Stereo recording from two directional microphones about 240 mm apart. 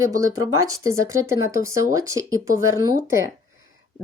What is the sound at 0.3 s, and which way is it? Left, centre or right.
Speech, right.